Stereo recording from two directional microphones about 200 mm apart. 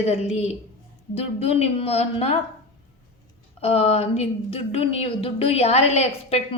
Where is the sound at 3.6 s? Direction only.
30° left (ahead or behind).